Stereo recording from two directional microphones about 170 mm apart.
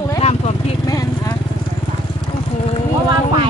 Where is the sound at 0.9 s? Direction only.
20° left (ahead or behind).